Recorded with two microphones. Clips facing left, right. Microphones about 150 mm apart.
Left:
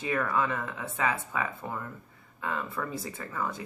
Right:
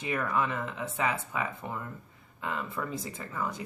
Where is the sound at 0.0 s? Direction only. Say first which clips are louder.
Left 1 dB; 20° right (ahead or behind).